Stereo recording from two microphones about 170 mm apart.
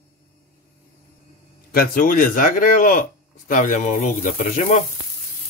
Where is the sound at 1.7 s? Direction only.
55° left (ahead or behind).